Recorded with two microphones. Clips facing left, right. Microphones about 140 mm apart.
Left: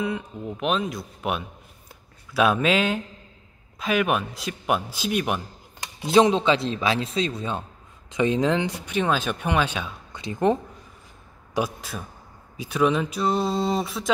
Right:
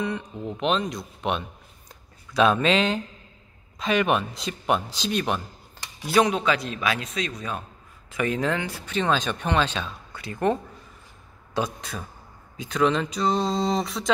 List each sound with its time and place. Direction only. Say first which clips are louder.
0.0 s speech: left 1 dB; 5° left (ahead or behind)
6.0 s speech: left 3 dB; 25° left (ahead or behind)
11.5 s speech: left 1 dB; 5° left (ahead or behind)